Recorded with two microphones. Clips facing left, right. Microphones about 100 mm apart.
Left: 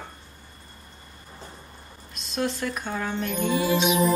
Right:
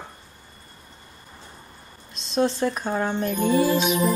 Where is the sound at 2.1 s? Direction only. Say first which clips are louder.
Right 5 dB; 30° right (ahead or behind).